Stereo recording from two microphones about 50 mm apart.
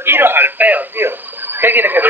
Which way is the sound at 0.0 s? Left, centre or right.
Right.